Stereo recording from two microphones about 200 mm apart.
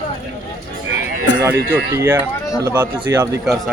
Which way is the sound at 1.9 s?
10° right (ahead or behind).